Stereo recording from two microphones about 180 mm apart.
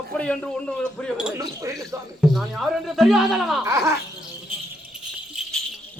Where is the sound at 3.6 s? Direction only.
15° right (ahead or behind).